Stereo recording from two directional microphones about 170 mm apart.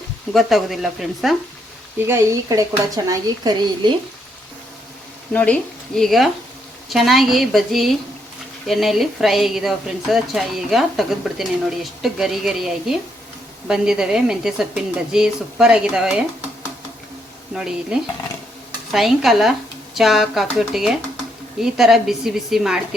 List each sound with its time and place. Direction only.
0.3 s a woman's voice: centre (ahead or behind)
2.0 s speech: 20° right (ahead or behind)
5.3 s a woman's voice: 10° left (ahead or behind)
17.5 s a woman's voice: 5° right (ahead or behind)